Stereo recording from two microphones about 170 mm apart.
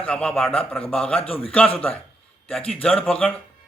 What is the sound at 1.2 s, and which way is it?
Speech, 35° left (ahead or behind).